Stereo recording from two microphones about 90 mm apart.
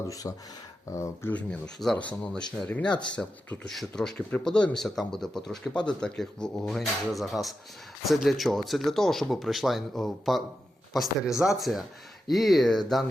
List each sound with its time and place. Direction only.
0.1 s speech: 40° left (ahead or behind)
1.3 s speech: 10° left (ahead or behind)